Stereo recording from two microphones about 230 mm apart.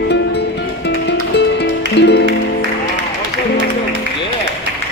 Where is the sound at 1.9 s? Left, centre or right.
Left.